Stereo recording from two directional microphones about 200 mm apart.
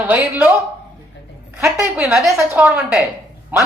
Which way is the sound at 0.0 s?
10° right (ahead or behind).